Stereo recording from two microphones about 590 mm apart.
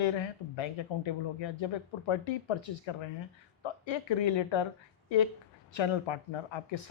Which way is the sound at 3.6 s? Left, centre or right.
Left.